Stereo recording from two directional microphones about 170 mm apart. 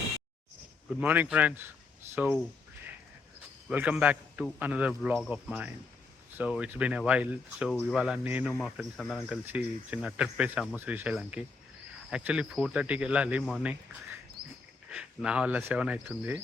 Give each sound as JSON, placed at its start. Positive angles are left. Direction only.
{"t": 0.9, "sound": "speech", "side_deg": -10}
{"t": 3.7, "sound": "speech", "side_deg": -5}
{"t": 8.6, "sound": "speech", "side_deg": 0}
{"t": 14.8, "sound": "speech", "side_deg": -5}